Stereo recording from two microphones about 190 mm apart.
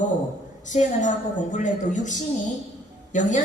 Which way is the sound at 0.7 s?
40° left (ahead or behind).